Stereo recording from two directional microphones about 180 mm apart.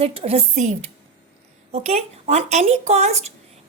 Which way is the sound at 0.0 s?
30° right (ahead or behind).